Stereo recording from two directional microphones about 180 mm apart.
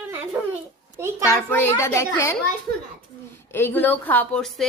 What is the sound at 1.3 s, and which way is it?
A woman's voice, 10° left (ahead or behind).